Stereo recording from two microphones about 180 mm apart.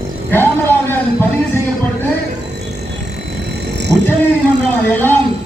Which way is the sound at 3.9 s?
20° right (ahead or behind).